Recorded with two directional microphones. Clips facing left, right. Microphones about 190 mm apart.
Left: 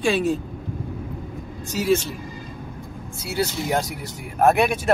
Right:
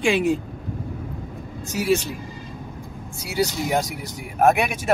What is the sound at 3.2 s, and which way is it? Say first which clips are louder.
Speech: right 1 dB; 15° right (ahead or behind).